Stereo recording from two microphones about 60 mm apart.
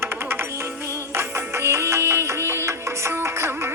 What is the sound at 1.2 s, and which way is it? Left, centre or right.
Music, right.